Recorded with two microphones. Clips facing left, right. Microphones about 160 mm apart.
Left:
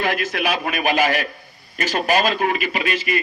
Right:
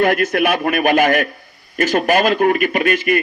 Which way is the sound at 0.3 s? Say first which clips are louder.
Right 6 dB; 55° right (ahead or behind).